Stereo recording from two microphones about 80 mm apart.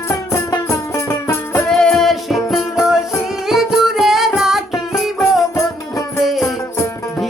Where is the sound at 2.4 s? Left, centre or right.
Left.